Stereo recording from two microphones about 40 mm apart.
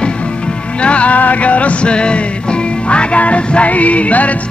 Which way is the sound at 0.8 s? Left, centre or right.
Left.